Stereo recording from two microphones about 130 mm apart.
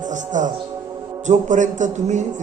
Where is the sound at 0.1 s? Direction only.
75° right (ahead or behind).